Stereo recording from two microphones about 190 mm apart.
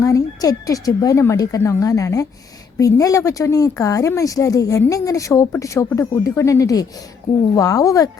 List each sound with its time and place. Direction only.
0.0 s speech: 15° left (ahead or behind)